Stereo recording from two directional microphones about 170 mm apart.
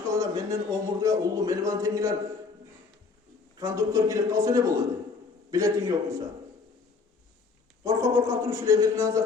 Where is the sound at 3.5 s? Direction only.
20° right (ahead or behind).